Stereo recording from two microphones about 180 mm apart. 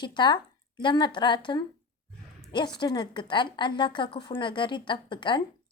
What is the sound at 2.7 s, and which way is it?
A woman's voice, 25° left (ahead or behind).